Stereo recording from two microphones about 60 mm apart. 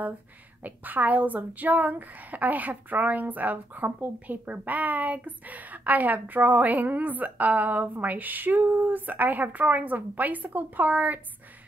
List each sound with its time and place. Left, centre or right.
0.6 s a woman's voice: right